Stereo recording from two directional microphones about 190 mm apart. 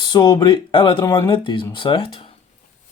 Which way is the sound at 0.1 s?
25° left (ahead or behind).